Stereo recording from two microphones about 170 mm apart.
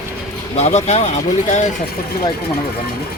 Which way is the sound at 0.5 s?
40° left (ahead or behind).